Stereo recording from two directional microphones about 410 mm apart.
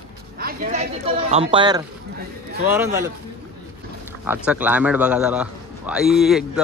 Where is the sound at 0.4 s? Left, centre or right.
Centre.